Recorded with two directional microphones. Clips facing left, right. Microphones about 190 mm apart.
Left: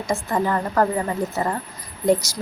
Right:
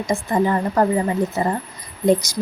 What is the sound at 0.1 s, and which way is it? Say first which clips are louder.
A woman's voice: right 3 dB; 15° right (ahead or behind).